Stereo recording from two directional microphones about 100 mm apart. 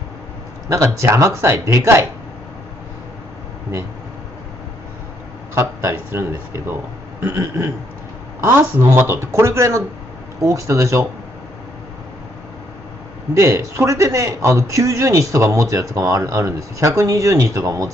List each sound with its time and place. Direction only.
0.7 s speech: 30° right (ahead or behind)
5.5 s a man's voice: 25° right (ahead or behind)
13.3 s a man's voice: 30° right (ahead or behind)